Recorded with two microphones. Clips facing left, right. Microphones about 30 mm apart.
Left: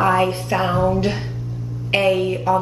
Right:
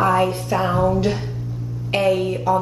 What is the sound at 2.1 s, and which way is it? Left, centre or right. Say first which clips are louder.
Speech: left 1 dB; centre.